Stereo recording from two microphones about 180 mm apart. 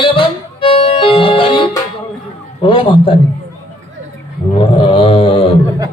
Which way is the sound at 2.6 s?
30° left (ahead or behind).